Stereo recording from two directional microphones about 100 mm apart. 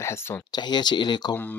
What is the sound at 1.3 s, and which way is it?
Speech, 15° left (ahead or behind).